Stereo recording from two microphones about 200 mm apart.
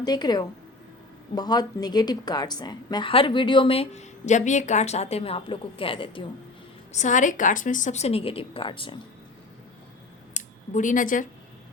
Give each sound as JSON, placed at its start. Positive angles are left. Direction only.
{"t": 0.0, "sound": "a woman's voice", "side_deg": 20}
{"t": 6.9, "sound": "a woman's voice", "side_deg": 40}
{"t": 10.3, "sound": "speech", "side_deg": 40}